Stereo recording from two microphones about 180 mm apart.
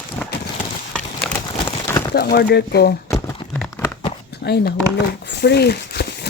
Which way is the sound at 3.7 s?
15° left (ahead or behind).